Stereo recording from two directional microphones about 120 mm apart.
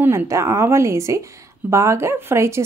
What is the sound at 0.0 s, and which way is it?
A woman's voice, 25° right (ahead or behind).